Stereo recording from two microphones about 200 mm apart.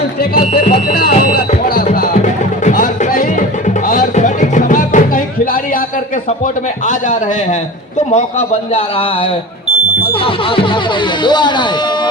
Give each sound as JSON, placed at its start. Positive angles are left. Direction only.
{"t": 0.2, "sound": "speech", "side_deg": 45}
{"t": 1.6, "sound": "music", "side_deg": 45}
{"t": 8.1, "sound": "a man's voice", "side_deg": 30}
{"t": 10.0, "sound": "music", "side_deg": 25}
{"t": 11.2, "sound": "speech", "side_deg": 20}